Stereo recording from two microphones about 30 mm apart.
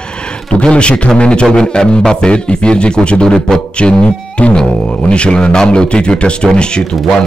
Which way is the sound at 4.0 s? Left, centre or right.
Left.